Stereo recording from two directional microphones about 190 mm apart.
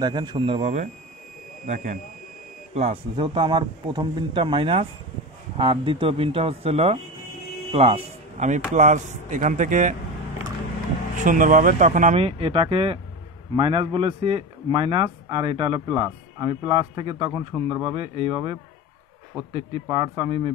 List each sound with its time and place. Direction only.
0.0 s a man's voice: 25° right (ahead or behind); by 2.0 s 40° right (ahead or behind)
2.7 s a man's voice: 30° right (ahead or behind)
11.2 s a man's voice: 45° right (ahead or behind); by 20.5 s 25° right (ahead or behind)